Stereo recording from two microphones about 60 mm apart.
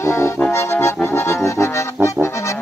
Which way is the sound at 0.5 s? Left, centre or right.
Left.